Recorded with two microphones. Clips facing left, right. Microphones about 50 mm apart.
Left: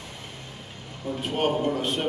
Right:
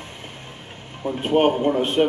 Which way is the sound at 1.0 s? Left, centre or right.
Right.